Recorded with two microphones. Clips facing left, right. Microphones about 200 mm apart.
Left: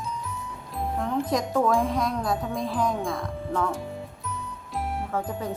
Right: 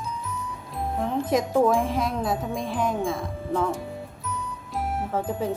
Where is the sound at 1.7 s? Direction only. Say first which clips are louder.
Even; 5° right (ahead or behind).